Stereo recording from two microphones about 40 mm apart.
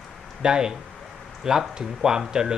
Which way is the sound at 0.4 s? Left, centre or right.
Centre.